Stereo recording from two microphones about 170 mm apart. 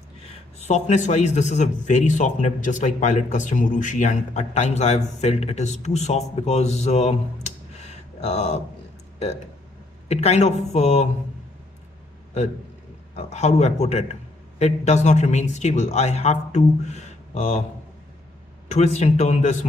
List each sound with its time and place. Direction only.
0.6 s a man's voice: 40° left (ahead or behind)
10.0 s a man's voice: 40° left (ahead or behind)
13.1 s a man's voice: 40° left (ahead or behind)
18.7 s a man's voice: 40° left (ahead or behind)